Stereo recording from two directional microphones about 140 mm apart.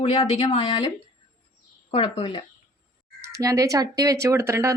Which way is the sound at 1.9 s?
35° left (ahead or behind).